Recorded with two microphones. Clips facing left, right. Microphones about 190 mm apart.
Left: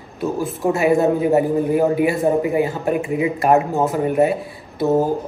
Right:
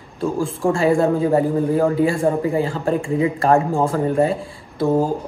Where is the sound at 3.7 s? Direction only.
5° left (ahead or behind).